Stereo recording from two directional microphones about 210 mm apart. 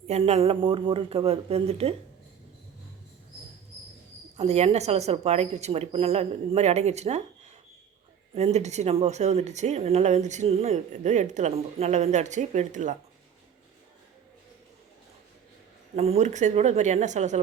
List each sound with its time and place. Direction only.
0.1 s speech: 30° right (ahead or behind)
4.4 s speech: 30° right (ahead or behind)
8.4 s speech: 30° right (ahead or behind)
16.0 s speech: 30° right (ahead or behind)